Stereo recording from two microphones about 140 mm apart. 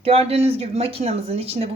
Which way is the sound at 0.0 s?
45° right (ahead or behind).